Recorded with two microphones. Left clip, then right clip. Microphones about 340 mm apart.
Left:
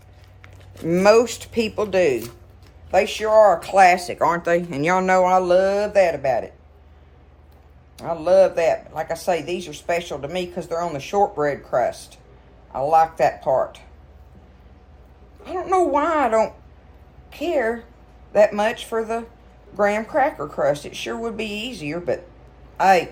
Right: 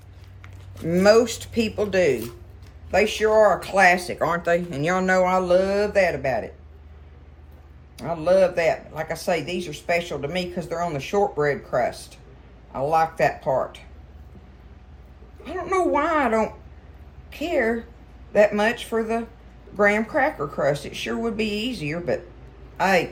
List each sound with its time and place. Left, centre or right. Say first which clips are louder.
0.9 s speech: left 2 dB; centre
7.9 s speech: left 3 dB; centre
15.4 s a woman's voice: left 3 dB; centre